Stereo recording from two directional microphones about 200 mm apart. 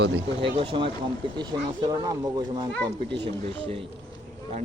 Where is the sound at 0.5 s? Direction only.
25° right (ahead or behind).